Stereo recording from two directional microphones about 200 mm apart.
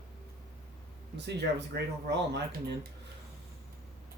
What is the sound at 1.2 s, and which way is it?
Speech, 55° right (ahead or behind).